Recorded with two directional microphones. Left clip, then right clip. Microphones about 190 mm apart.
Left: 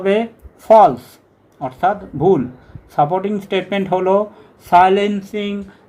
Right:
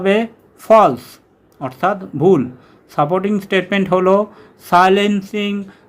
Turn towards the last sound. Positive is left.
turn(degrees=-15)  # may be behind; listen again after turning